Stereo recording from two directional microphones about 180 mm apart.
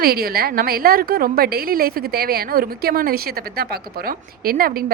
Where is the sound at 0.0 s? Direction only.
60° right (ahead or behind).